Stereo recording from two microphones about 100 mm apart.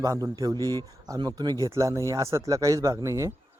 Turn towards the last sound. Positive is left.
turn(degrees=-30)  # may be behind; listen again after turning